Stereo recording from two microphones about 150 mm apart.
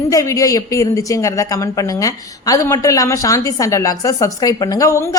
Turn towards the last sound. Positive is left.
turn(degrees=20)  # may be behind; listen again after turning